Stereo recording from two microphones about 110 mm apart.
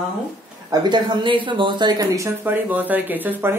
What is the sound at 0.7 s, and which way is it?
Speech, 40° right (ahead or behind).